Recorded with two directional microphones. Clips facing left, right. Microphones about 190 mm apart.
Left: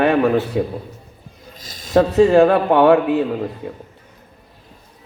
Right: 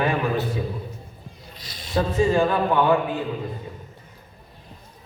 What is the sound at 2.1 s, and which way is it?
A man's voice, 70° left (ahead or behind).